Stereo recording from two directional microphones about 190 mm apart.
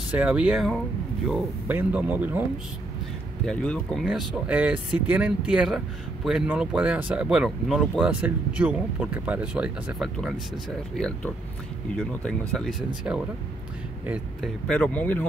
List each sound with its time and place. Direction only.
0.1 s speech: 5° right (ahead or behind)
3.4 s speech: 5° left (ahead or behind)
11.0 s speech: 5° left (ahead or behind)
14.7 s speech: 5° left (ahead or behind)